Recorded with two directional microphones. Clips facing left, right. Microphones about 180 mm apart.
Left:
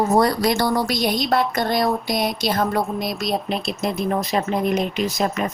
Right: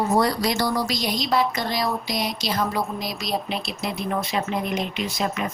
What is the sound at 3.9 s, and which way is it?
Speech, 45° left (ahead or behind).